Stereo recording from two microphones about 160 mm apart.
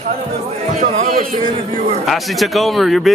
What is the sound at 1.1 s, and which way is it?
Speech, 65° right (ahead or behind).